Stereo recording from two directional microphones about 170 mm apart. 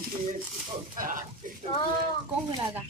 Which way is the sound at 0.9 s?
50° right (ahead or behind).